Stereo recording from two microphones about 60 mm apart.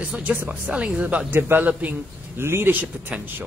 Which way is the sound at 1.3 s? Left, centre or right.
Right.